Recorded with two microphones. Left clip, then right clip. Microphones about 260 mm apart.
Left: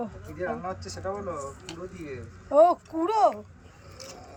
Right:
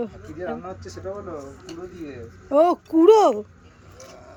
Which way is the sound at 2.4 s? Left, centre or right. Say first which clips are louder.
Right 1 dB; centre.